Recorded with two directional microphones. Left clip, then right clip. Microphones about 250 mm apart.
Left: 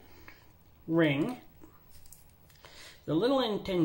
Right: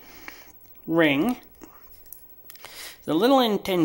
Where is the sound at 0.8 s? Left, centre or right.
Right.